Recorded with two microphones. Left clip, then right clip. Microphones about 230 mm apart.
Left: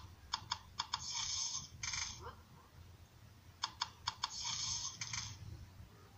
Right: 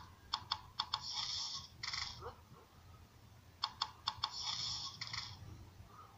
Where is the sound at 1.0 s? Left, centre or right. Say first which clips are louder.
Even; left.